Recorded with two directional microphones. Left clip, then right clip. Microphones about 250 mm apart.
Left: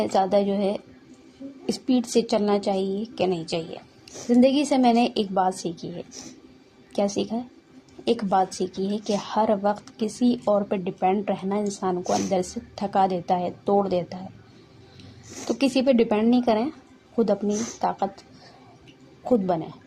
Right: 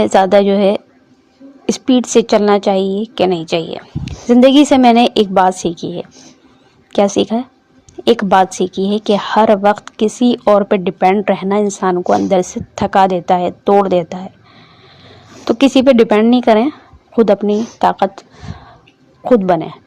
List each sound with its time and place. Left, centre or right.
0.0 s a woman's voice: right
1.8 s a woman's voice: right
15.4 s a woman's voice: right
19.2 s a woman's voice: right